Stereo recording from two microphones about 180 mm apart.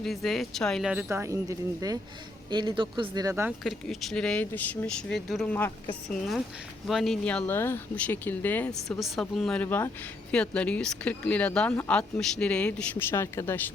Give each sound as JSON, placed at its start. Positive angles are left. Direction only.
{"t": 0.0, "sound": "speech", "side_deg": 0}
{"t": 3.6, "sound": "speech", "side_deg": 0}